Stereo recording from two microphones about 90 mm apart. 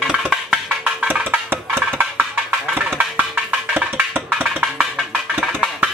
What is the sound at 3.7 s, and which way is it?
Music, 20° right (ahead or behind).